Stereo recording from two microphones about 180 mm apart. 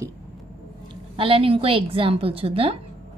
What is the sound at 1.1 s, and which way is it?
A woman's voice, 30° right (ahead or behind).